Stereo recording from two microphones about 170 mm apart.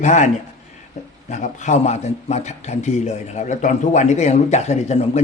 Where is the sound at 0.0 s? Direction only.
45° left (ahead or behind).